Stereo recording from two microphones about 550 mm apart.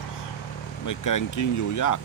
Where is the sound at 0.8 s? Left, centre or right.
Left.